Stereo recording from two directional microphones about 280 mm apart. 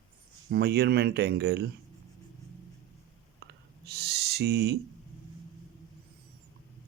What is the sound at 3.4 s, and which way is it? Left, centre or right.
Owl, right.